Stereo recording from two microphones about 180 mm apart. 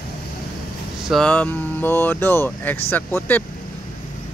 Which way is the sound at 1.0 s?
5° left (ahead or behind).